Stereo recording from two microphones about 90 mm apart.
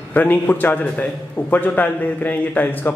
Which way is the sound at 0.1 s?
20° left (ahead or behind).